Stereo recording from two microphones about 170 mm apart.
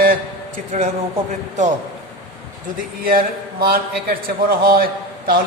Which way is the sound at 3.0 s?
60° right (ahead or behind).